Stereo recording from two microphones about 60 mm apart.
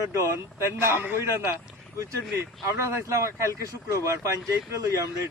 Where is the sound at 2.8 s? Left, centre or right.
Right.